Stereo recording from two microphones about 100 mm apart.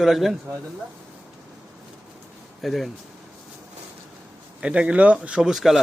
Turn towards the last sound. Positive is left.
turn(degrees=0)  # may be behind; listen again after turning